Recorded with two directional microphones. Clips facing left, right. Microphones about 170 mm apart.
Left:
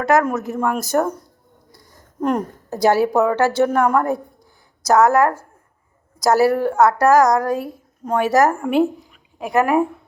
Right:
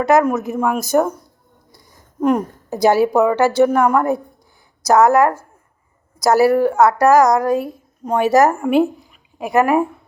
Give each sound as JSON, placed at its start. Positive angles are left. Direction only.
{"t": 0.0, "sound": "a woman's voice", "side_deg": -15}
{"t": 2.2, "sound": "a woman's voice", "side_deg": -10}